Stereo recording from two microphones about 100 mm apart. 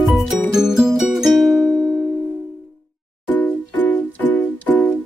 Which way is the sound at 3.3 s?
15° left (ahead or behind).